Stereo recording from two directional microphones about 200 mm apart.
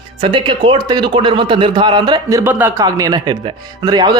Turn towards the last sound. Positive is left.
turn(degrees=-20)  # may be behind; listen again after turning